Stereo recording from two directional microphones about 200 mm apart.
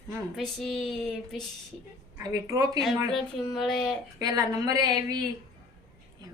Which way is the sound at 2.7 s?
Centre (ahead or behind).